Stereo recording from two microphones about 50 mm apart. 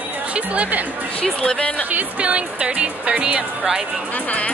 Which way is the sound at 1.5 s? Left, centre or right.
Left.